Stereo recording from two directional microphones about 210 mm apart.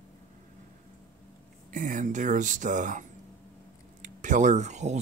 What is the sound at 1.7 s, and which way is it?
Speech, 35° right (ahead or behind).